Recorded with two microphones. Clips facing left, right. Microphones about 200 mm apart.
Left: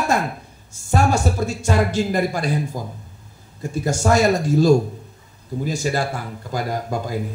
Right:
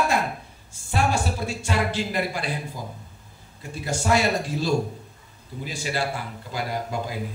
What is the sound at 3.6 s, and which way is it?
A man's voice, 45° left (ahead or behind).